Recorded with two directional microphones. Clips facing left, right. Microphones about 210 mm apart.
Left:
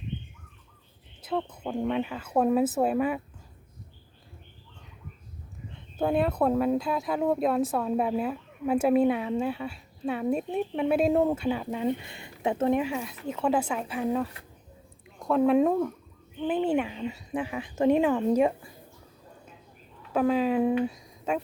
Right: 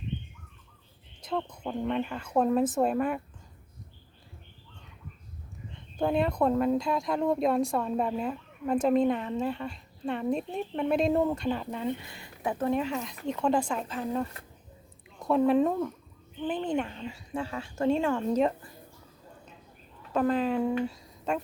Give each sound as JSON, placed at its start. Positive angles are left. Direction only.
{"t": 1.2, "sound": "a sound", "side_deg": 5}
{"t": 1.9, "sound": "speech", "side_deg": 5}
{"t": 6.0, "sound": "speech", "side_deg": 5}
{"t": 12.0, "sound": "speech", "side_deg": 25}
{"t": 12.8, "sound": "speech", "side_deg": 10}
{"t": 15.5, "sound": "speech", "side_deg": 10}
{"t": 17.1, "sound": "speech", "side_deg": 20}
{"t": 20.1, "sound": "speech", "side_deg": 10}
{"t": 20.6, "sound": "speech", "side_deg": 20}
{"t": 21.3, "sound": "speech", "side_deg": 5}